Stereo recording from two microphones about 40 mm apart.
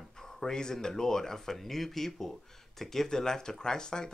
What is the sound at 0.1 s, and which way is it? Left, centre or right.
Speech, centre.